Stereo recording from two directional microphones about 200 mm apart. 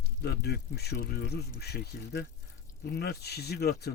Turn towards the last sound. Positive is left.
turn(degrees=50)  # may be behind; listen again after turning